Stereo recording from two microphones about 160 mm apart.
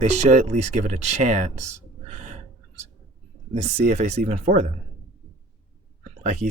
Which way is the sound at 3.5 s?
45° right (ahead or behind).